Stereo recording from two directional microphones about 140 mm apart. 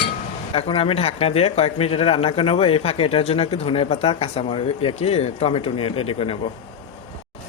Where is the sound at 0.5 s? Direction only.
45° left (ahead or behind).